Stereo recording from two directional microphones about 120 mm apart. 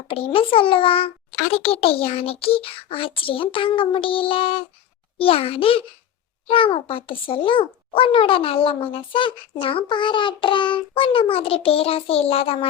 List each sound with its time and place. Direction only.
0.1 s a child's voice: 50° left (ahead or behind)